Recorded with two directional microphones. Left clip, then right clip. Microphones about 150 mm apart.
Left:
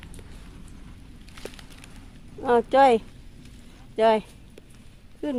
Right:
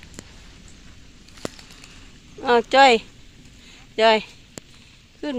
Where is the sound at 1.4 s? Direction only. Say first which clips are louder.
Right 7 dB; 20° right (ahead or behind).